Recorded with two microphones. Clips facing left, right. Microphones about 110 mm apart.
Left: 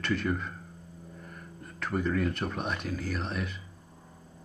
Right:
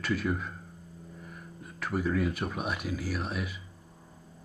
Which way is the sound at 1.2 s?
5° right (ahead or behind).